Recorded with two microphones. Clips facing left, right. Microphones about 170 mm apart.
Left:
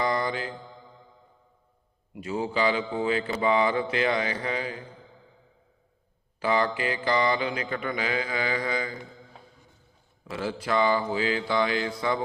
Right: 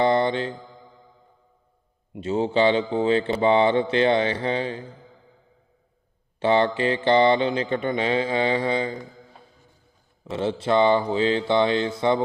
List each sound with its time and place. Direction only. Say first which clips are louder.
0.0 s mantra: right 7 dB; 30° right (ahead or behind)
2.1 s mantra: right 6 dB; 25° right (ahead or behind)
6.4 s mantra: right 5 dB; 30° right (ahead or behind)
10.2 s mantra: right 6 dB; 25° right (ahead or behind)